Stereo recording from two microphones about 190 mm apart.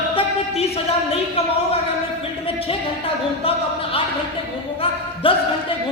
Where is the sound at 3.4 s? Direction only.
30° left (ahead or behind).